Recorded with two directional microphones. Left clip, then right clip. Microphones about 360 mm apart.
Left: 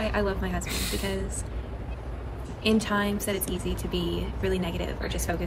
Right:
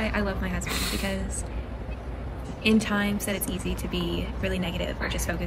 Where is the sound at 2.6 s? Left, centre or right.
Centre.